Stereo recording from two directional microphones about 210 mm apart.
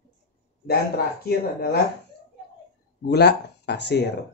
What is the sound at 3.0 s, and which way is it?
Speech, 50° left (ahead or behind).